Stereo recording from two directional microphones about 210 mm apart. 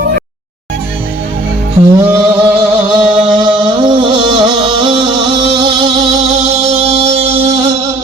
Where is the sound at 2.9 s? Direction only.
20° right (ahead or behind).